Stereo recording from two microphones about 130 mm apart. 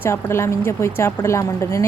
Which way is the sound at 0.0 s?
20° left (ahead or behind).